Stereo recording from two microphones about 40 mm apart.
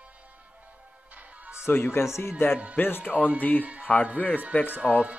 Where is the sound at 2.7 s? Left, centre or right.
Left.